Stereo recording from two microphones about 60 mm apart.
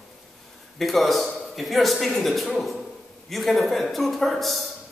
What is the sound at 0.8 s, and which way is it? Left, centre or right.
A man's voice, centre.